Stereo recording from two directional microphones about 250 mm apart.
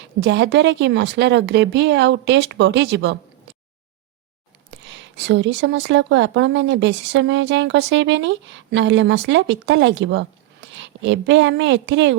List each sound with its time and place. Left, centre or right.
0.0 s speech: right
4.9 s speech: right